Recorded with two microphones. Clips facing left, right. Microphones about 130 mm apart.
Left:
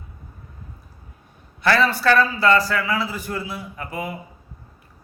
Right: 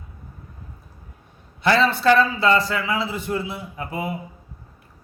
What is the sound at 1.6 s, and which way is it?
A man's voice, 20° right (ahead or behind).